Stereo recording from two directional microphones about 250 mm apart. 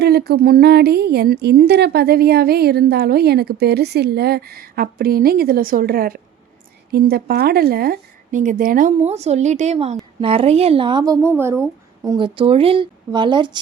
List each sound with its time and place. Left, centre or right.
0.0 s a woman's voice: right; by 13.6 s centre